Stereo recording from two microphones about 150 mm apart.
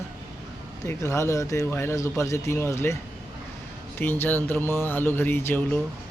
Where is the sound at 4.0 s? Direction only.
15° left (ahead or behind).